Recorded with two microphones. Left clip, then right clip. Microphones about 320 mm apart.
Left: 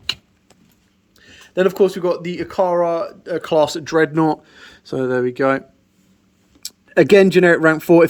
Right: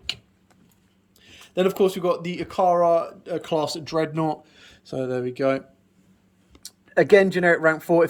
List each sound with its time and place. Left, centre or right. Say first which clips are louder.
1.1 s a sound: left 5 dB; centre
2.2 s speech: left 2 dB; centre
6.7 s speech: left 4 dB; left